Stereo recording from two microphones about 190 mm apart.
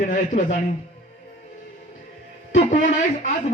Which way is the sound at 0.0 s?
40° left (ahead or behind).